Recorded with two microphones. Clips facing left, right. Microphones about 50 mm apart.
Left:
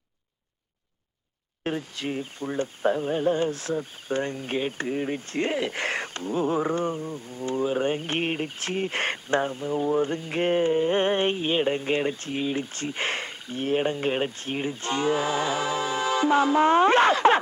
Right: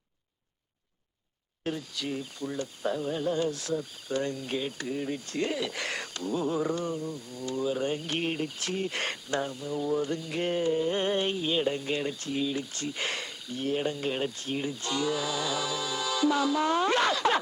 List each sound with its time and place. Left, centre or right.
1.6 s speech: left